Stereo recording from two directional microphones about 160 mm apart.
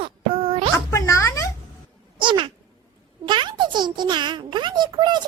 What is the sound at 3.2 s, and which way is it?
A child's voice, 30° right (ahead or behind).